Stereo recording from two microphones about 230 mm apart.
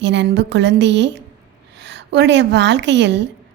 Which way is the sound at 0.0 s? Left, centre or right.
Right.